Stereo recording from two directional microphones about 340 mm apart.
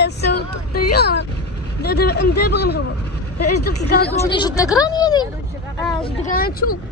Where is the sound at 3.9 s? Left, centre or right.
Left.